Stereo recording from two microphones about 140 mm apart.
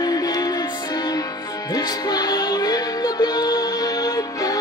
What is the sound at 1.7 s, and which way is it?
Music, 30° left (ahead or behind).